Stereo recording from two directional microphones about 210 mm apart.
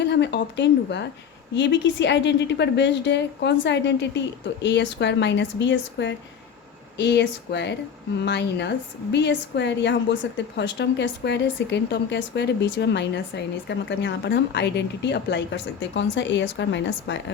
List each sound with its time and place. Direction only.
0.0 s a woman's voice: 55° left (ahead or behind)